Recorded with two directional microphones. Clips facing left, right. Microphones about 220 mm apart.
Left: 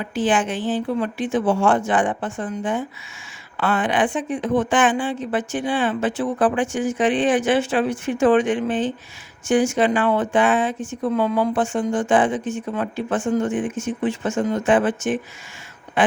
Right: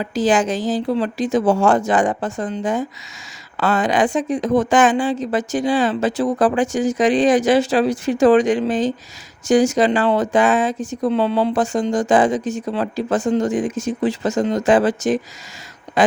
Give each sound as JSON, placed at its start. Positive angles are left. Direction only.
{"t": 0.0, "sound": "a woman's voice", "side_deg": -40}